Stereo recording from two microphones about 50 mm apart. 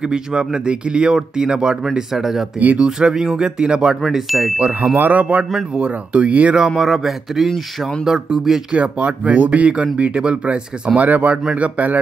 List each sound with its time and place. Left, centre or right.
0.1 s speech: centre
2.6 s a man's voice: right
3.0 s speech: centre
4.0 s ding: centre
4.6 s speech: right
4.9 s a man's voice: right
5.2 s speech: right
6.8 s speech: centre
8.7 s a man's voice: right